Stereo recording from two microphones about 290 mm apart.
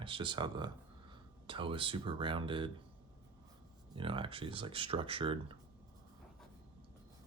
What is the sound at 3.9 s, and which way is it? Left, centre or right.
Speech, centre.